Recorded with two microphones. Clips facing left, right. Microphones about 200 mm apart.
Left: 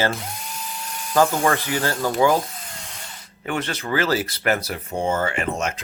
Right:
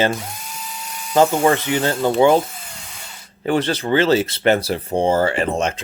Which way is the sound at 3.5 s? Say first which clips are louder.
Right 7 dB; 30° right (ahead or behind).